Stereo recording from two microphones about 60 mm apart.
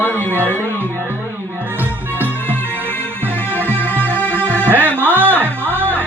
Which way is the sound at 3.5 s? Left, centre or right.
Left.